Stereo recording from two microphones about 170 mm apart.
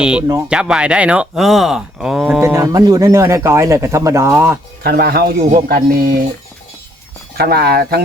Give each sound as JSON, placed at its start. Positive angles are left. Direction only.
{"t": 0.0, "sound": "speech", "side_deg": -5}
{"t": 2.4, "sound": "speech", "side_deg": -15}
{"t": 4.8, "sound": "speech", "side_deg": -70}
{"t": 7.3, "sound": "speech", "side_deg": -70}